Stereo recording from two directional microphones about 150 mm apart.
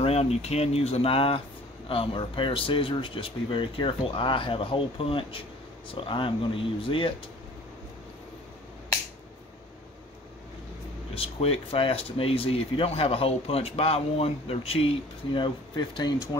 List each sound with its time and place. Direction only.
0.0 s speech: 45° left (ahead or behind)
11.1 s speech: 40° left (ahead or behind)